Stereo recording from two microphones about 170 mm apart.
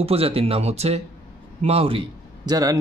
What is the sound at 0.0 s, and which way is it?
A man's voice, 35° right (ahead or behind).